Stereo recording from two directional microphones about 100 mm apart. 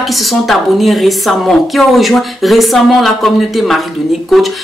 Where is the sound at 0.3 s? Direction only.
Centre (ahead or behind).